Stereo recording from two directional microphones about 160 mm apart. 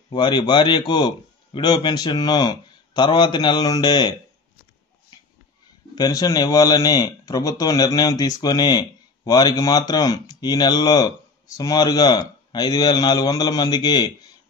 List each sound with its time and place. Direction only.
0.1 s speech: 30° left (ahead or behind)
5.9 s speech: 25° left (ahead or behind)